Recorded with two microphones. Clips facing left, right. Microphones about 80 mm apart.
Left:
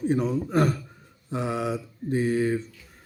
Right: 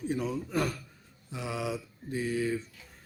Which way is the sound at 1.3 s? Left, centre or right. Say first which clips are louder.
Left 9 dB; left.